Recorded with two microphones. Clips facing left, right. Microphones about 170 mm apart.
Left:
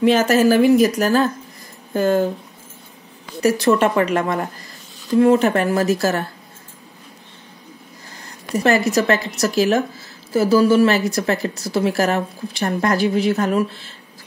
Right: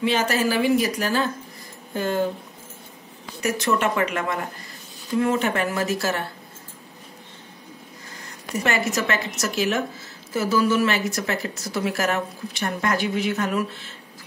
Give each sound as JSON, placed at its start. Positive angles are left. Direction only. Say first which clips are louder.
{"t": 0.0, "sound": "speech", "louder": "left 8 dB", "side_deg": 45}
{"t": 3.4, "sound": "a woman's voice", "louder": "left 7 dB", "side_deg": 35}
{"t": 8.6, "sound": "a woman's voice", "louder": "left 8 dB", "side_deg": 35}